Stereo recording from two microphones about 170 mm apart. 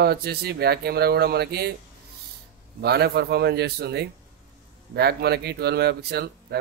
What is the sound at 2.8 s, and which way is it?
Speech, 70° right (ahead or behind).